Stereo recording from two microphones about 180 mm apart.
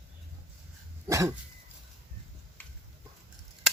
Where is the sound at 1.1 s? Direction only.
15° right (ahead or behind).